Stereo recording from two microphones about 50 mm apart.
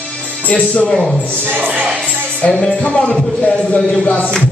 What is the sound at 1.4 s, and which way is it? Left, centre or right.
Speech, right.